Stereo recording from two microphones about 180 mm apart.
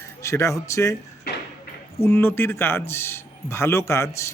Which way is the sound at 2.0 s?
15° left (ahead or behind).